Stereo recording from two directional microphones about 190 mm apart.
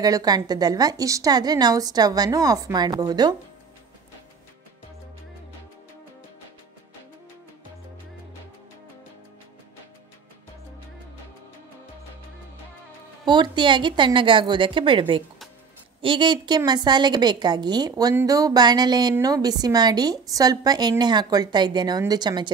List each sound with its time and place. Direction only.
0.0 s a woman's voice: 20° right (ahead or behind)
13.2 s a woman's voice: 25° right (ahead or behind)